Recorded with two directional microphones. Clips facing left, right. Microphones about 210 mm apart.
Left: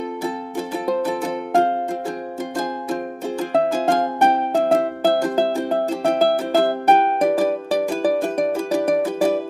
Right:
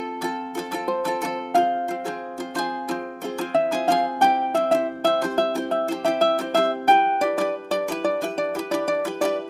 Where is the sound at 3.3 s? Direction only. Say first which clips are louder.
Left 3 dB; 15° left (ahead or behind).